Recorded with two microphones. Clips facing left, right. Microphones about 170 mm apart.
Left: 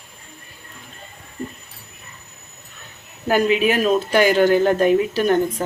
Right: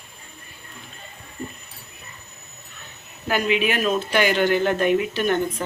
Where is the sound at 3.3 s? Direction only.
40° left (ahead or behind).